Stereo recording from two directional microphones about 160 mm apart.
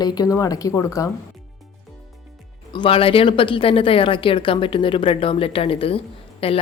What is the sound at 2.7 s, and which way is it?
Speech, 35° left (ahead or behind).